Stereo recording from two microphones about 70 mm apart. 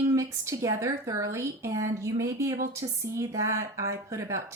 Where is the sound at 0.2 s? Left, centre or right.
Right.